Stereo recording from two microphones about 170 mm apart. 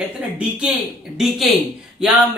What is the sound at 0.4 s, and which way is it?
Speech, 5° right (ahead or behind).